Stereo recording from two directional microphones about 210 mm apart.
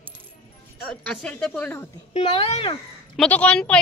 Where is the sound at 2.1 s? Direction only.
25° left (ahead or behind).